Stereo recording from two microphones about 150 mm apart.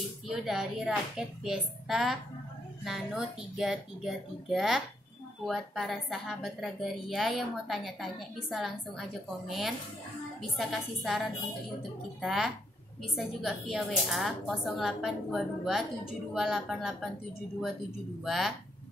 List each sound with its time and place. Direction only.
0.3 s a woman's voice: centre (ahead or behind)
18.2 s a woman's voice: centre (ahead or behind)